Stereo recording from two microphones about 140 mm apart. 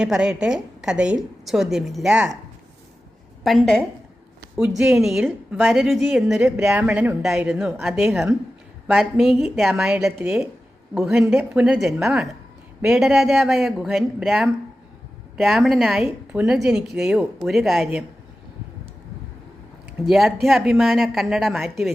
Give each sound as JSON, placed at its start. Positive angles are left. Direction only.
{"t": 0.0, "sound": "a woman's voice", "side_deg": -5}
{"t": 3.4, "sound": "a woman's voice", "side_deg": 0}
{"t": 8.1, "sound": "speech", "side_deg": -20}
{"t": 8.9, "sound": "a woman's voice", "side_deg": 0}
{"t": 20.1, "sound": "a woman's voice", "side_deg": 0}